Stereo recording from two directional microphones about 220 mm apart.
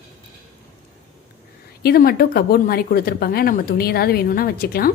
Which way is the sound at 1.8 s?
45° left (ahead or behind).